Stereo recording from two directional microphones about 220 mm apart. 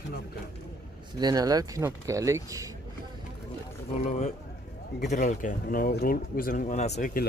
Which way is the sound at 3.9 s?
30° left (ahead or behind).